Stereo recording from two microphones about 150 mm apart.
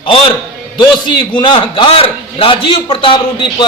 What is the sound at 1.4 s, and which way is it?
A man's voice, 35° left (ahead or behind).